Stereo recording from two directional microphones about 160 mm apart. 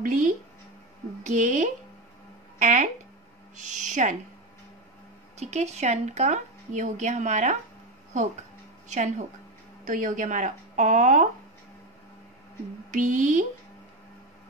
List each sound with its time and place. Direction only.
0.0 s speech: 50° right (ahead or behind)
5.4 s speech: 45° right (ahead or behind)
12.9 s speech: 55° right (ahead or behind)